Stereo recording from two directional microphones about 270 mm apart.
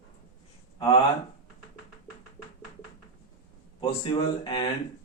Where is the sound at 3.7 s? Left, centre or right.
Centre.